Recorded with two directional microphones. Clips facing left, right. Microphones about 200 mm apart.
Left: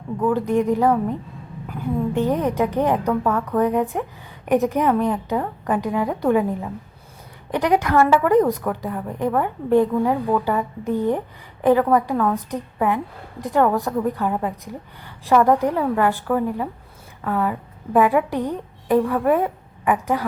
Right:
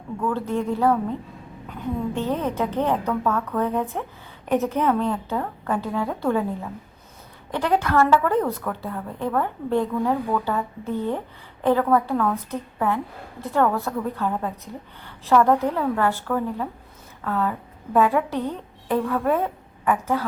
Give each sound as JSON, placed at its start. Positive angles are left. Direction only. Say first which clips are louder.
{"t": 0.2, "sound": "a woman's voice", "louder": "left 6 dB", "side_deg": 15}